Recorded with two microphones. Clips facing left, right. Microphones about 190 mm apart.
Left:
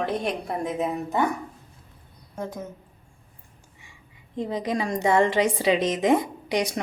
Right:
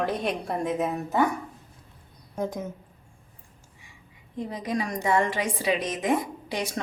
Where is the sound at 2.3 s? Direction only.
15° right (ahead or behind).